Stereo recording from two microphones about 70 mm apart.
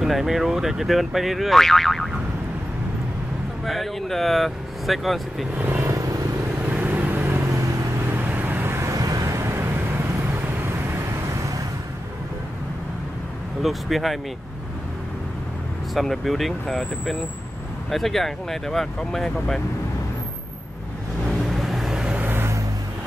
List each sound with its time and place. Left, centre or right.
0.0 s speech: centre
3.6 s speech: centre
5.6 s speech: right
5.9 s vehicle: right
6.7 s vehicle: right
8.7 s vehicle: right
13.6 s speech: centre
15.9 s speech: centre
21.5 s vehicle: centre
22.1 s vehicle: right